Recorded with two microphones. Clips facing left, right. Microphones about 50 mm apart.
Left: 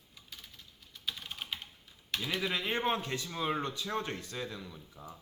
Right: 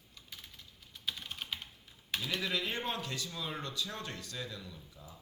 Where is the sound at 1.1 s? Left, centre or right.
Centre.